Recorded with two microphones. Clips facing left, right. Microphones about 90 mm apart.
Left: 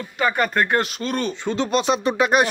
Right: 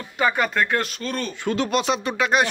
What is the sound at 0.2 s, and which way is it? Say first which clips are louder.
Speech: left 1 dB; 5° right (ahead or behind).